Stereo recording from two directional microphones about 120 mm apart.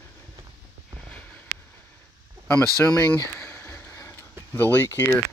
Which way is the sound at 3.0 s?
25° left (ahead or behind).